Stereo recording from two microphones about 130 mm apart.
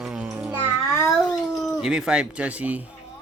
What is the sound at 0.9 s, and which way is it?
Speech, 25° left (ahead or behind).